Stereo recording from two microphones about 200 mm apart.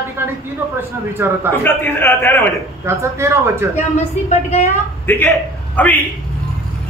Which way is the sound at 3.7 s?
35° left (ahead or behind).